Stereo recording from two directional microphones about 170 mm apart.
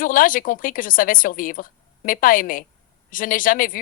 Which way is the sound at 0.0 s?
55° left (ahead or behind).